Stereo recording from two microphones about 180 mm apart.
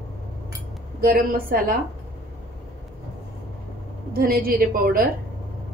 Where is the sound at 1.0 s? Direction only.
55° right (ahead or behind).